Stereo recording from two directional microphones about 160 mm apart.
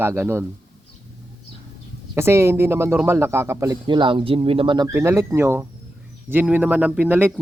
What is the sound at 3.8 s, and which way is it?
Speech, 30° right (ahead or behind).